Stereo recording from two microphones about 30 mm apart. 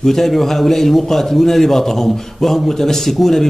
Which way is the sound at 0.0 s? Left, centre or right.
Centre.